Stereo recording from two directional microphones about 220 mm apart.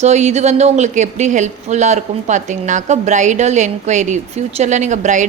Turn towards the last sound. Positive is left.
turn(degrees=-35)  # may be behind; listen again after turning